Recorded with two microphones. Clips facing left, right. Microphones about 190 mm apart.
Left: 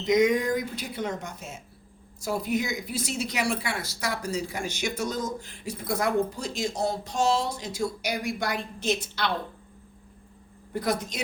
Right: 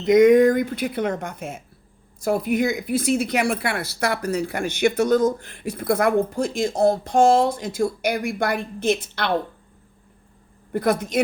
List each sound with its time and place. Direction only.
0.0 s speech: 55° right (ahead or behind)
10.7 s speech: 55° right (ahead or behind)